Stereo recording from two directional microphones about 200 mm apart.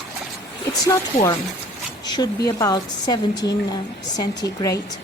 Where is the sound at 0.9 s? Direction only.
15° left (ahead or behind).